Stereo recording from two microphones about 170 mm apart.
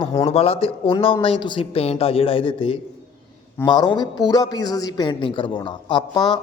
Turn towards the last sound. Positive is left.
turn(degrees=25)  # may be behind; listen again after turning